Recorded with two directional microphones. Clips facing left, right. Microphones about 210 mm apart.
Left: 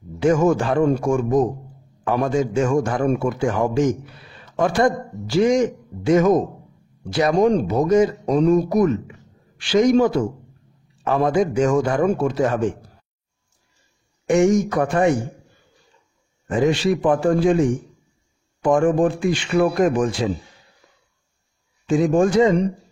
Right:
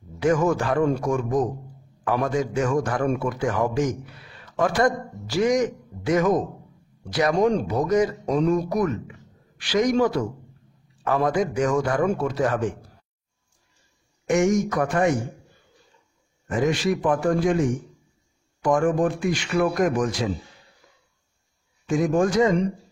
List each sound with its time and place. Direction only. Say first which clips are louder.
0.2 s a man's voice: left 4 dB; 25° left (ahead or behind)
14.2 s a man's voice: left 4 dB; 30° left (ahead or behind)
16.4 s a man's voice: left 4 dB; 30° left (ahead or behind)
21.8 s a man's voice: left 4 dB; 30° left (ahead or behind)